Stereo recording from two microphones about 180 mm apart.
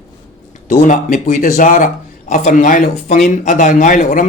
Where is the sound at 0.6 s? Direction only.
45° left (ahead or behind).